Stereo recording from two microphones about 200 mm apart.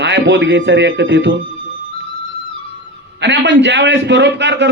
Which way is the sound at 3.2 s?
60° right (ahead or behind).